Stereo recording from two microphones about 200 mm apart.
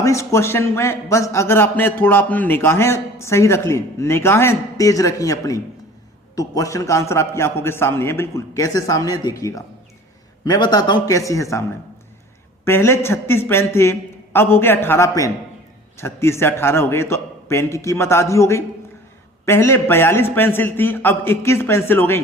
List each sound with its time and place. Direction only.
0.0 s a man's voice: 15° left (ahead or behind)
12.6 s a man's voice: 10° left (ahead or behind)